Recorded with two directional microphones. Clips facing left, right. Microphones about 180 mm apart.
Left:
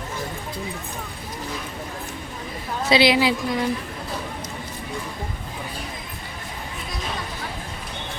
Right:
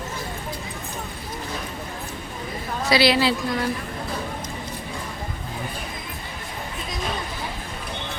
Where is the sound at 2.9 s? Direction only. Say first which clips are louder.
Left 1 dB; 20° left (ahead or behind).